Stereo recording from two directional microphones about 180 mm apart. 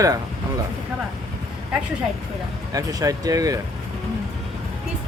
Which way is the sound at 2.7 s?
20° right (ahead or behind).